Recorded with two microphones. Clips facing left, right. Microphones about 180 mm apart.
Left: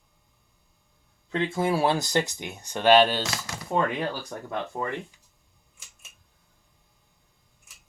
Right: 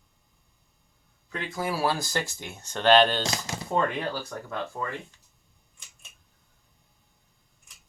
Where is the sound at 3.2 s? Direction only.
25° right (ahead or behind).